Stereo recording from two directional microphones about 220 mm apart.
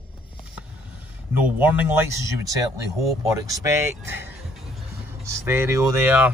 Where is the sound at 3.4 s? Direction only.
15° right (ahead or behind).